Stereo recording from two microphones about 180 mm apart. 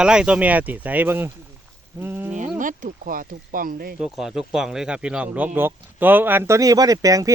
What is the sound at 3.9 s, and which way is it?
Speech, 5° right (ahead or behind).